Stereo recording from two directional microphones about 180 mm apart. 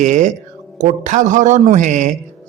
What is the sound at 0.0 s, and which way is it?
A man's voice, 40° right (ahead or behind).